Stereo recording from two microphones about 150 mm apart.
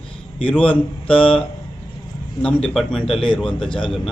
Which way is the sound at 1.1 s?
35° left (ahead or behind).